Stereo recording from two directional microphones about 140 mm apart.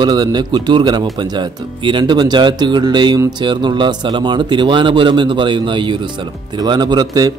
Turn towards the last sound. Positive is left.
turn(degrees=-30)  # may be behind; listen again after turning